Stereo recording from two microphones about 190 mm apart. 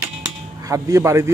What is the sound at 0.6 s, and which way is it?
Speech, 15° right (ahead or behind).